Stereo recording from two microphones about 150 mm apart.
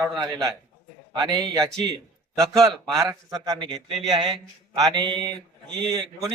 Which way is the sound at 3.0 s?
25° right (ahead or behind).